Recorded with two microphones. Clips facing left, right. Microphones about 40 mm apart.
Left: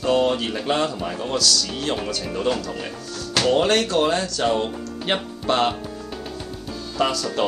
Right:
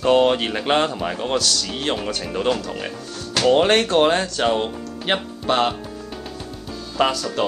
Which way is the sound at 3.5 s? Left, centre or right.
Right.